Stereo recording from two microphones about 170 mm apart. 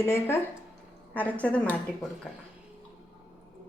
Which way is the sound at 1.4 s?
10° left (ahead or behind).